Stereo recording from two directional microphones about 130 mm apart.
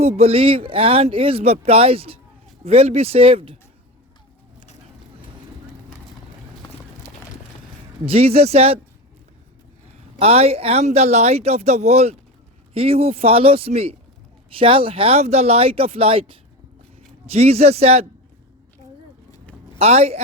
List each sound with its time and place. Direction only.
0.0 s speech: 50° right (ahead or behind)
8.0 s speech: 50° right (ahead or behind)
10.2 s speech: 50° right (ahead or behind)
19.8 s speech: 55° right (ahead or behind)